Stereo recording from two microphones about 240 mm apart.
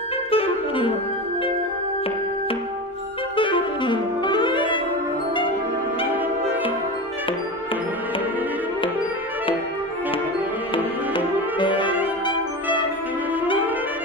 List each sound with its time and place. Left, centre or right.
0.3 s clarinet: left
3.3 s saxophone: left
10.7 s music: centre